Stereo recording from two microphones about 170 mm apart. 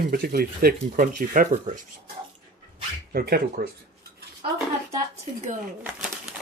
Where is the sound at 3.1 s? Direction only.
65° right (ahead or behind).